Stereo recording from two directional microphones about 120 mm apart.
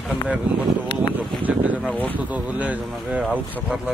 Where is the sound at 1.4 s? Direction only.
15° right (ahead or behind).